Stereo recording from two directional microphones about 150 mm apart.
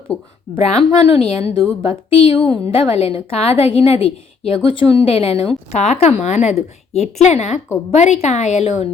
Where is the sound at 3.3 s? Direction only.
40° left (ahead or behind).